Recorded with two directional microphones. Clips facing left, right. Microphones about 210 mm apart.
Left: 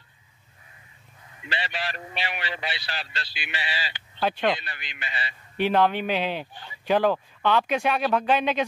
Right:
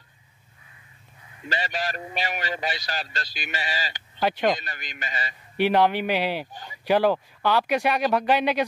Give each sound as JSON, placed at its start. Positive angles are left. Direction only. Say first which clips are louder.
{"t": 1.4, "sound": "a man's voice", "louder": "right 3 dB", "side_deg": -45}
{"t": 4.2, "sound": "speech", "louder": "right 2 dB", "side_deg": -10}
{"t": 4.5, "sound": "a man's voice", "louder": "right 2 dB", "side_deg": -45}
{"t": 5.6, "sound": "speech", "louder": "right 1 dB", "side_deg": -10}